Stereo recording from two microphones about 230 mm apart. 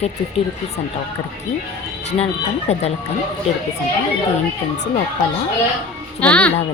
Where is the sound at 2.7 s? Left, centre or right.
Left.